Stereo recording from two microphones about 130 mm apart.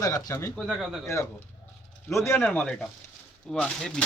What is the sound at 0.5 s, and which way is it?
Speech, 5° right (ahead or behind).